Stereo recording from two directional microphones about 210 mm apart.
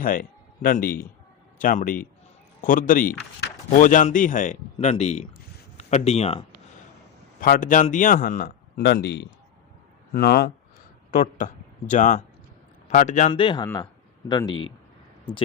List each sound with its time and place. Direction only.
0.0 s a man's voice: 40° left (ahead or behind)
7.3 s speech: 40° left (ahead or behind); by 14.7 s 20° left (ahead or behind)